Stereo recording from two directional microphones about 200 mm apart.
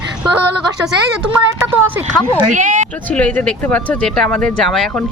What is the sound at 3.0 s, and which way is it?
Speech, 5° left (ahead or behind).